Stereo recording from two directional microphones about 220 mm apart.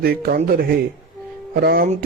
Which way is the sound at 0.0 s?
45° right (ahead or behind).